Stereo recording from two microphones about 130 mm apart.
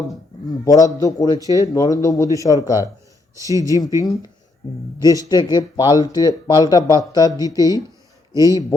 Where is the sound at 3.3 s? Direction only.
25° right (ahead or behind).